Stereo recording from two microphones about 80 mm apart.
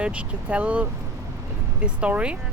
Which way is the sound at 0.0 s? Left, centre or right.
Centre.